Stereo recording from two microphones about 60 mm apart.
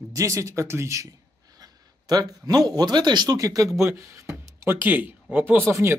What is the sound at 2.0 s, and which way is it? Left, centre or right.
Speech, right.